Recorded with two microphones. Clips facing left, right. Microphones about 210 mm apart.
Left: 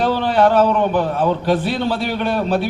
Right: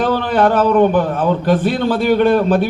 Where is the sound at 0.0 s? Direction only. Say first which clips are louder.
Right 1 dB; 50° right (ahead or behind).